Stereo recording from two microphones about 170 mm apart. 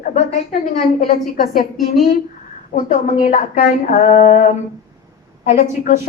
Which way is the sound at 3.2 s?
45° left (ahead or behind).